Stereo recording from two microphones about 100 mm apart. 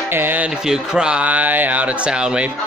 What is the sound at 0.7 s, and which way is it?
Speech, 10° right (ahead or behind).